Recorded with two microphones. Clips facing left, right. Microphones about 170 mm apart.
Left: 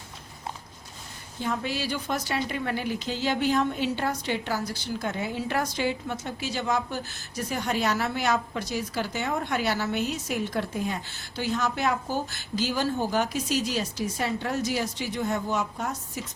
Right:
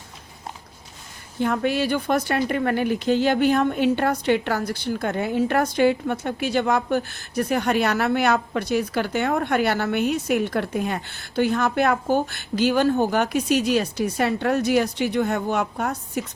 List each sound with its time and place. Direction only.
1.4 s a woman's voice: 60° right (ahead or behind)